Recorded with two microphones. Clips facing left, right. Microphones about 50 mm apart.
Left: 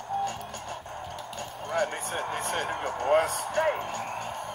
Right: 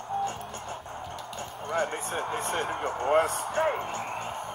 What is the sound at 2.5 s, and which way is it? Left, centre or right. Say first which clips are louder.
Speech: even; centre.